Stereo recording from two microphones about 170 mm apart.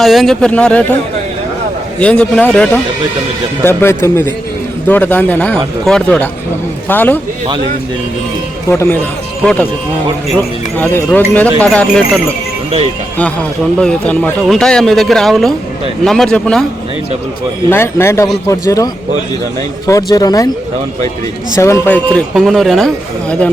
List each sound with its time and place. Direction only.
0.0 s speech: centre (ahead or behind)
2.0 s speech: 5° left (ahead or behind)
8.7 s speech: 15° left (ahead or behind)
9.4 s speech: 5° left (ahead or behind)
10.8 s speech: 10° left (ahead or behind)
13.7 s speech: 5° left (ahead or behind)
17.7 s speech: 15° left (ahead or behind)
19.9 s speech: 20° left (ahead or behind)
21.6 s speech: 15° left (ahead or behind)
22.4 s speech: centre (ahead or behind)